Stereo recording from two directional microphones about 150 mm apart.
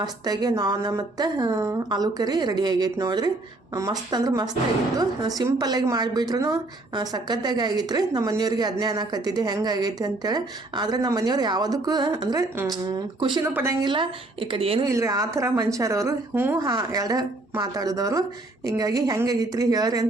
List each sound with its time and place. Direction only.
0.0 s a woman's voice: 25° right (ahead or behind)
13.4 s a woman's voice: 15° right (ahead or behind)
13.8 s a woman's voice: 30° right (ahead or behind)
14.8 s a woman's voice: 20° right (ahead or behind)